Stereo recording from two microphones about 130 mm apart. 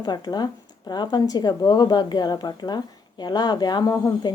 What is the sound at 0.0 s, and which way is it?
A woman's voice, 30° left (ahead or behind).